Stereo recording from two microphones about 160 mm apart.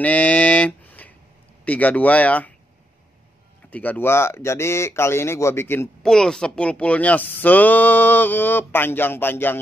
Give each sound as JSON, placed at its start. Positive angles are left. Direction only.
{"t": 0.0, "sound": "a sound", "side_deg": 10}
{"t": 1.6, "sound": "speech", "side_deg": 10}
{"t": 3.7, "sound": "speech", "side_deg": 10}
{"t": 6.0, "sound": "speech", "side_deg": 5}